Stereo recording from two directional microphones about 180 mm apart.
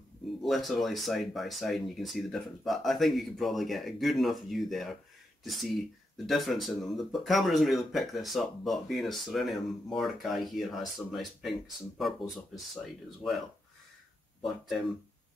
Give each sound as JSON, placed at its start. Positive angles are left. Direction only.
{"t": 0.4, "sound": "speech", "side_deg": 0}
{"t": 14.4, "sound": "speech", "side_deg": 0}